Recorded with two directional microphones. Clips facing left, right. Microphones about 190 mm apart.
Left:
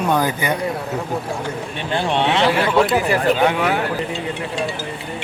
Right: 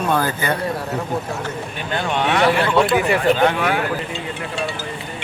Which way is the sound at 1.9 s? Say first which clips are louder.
Left 2 dB; 30° left (ahead or behind).